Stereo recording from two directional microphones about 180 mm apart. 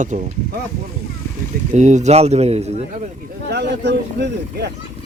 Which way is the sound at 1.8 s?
40° right (ahead or behind).